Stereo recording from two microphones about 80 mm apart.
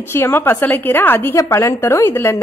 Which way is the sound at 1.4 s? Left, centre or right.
Left.